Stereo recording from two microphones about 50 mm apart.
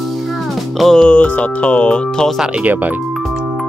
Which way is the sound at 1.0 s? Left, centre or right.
Left.